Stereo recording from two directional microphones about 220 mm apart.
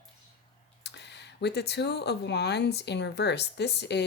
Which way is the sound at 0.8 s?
50° left (ahead or behind).